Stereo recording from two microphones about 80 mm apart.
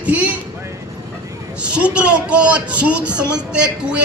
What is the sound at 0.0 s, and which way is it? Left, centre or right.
Speech, centre.